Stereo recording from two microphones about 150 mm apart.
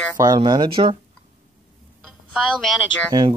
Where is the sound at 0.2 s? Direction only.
25° right (ahead or behind).